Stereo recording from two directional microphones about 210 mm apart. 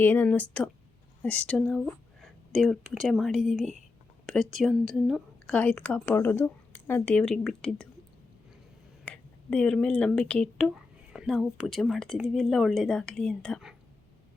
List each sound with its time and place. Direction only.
0.0 s speech: 10° left (ahead or behind)
9.0 s speech: 5° left (ahead or behind)